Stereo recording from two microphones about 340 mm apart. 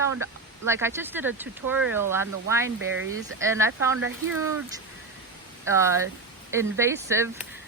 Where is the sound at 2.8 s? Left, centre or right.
Right.